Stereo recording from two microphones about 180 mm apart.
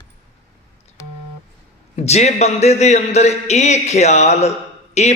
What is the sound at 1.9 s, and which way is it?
A man's voice, 35° left (ahead or behind).